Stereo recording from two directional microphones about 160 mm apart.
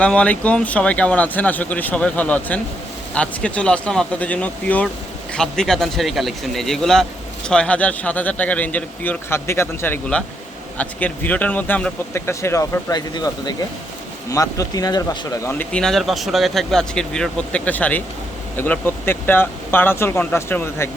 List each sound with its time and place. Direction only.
0.0 s speech: 5° left (ahead or behind); by 15.3 s 25° left (ahead or behind)
15.4 s speech: 10° left (ahead or behind)